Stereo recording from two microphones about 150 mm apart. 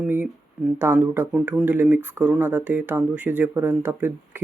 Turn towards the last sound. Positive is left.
turn(degrees=-15)  # may be behind; listen again after turning